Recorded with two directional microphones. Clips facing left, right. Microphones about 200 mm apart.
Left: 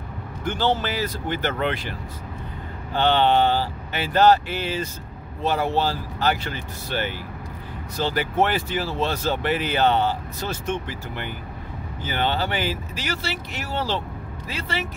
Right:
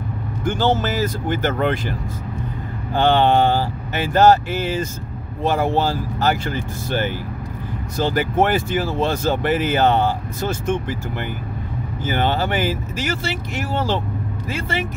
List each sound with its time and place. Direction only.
0.5 s speech: 45° right (ahead or behind)